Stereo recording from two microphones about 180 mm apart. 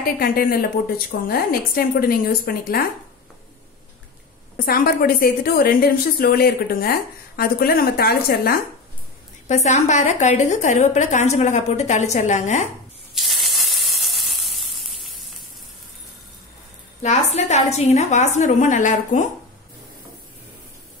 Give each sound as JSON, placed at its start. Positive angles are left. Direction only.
{"t": 0.0, "sound": "a woman's voice", "side_deg": 55}
{"t": 4.6, "sound": "a woman's voice", "side_deg": 55}
{"t": 9.5, "sound": "a woman's voice", "side_deg": 40}
{"t": 13.1, "sound": "sizzle", "side_deg": 0}
{"t": 17.0, "sound": "a woman's voice", "side_deg": 40}